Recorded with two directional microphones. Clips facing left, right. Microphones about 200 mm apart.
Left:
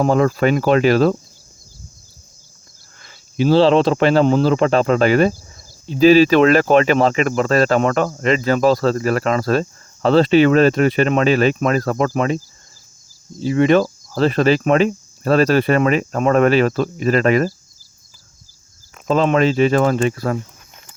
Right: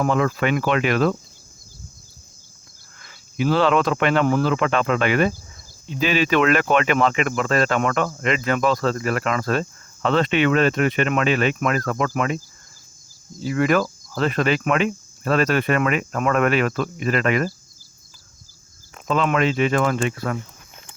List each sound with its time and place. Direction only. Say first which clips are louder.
0.0 s speech: left 5 dB; 35° left (ahead or behind)
3.0 s speech: left 5 dB; 30° left (ahead or behind)
13.4 s speech: left 5 dB; 25° left (ahead or behind)
19.0 s speech: left 5 dB; 35° left (ahead or behind)